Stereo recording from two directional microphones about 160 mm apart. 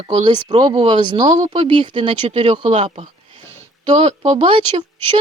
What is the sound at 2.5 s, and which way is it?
Speech, 45° right (ahead or behind).